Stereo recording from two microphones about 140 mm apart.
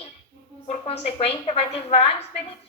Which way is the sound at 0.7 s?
45° left (ahead or behind).